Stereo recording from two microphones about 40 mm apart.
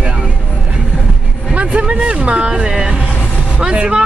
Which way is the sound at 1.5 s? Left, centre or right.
Right.